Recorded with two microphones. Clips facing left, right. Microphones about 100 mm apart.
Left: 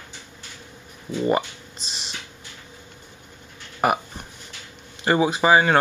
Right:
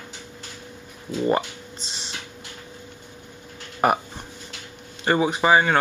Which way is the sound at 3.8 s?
5° left (ahead or behind).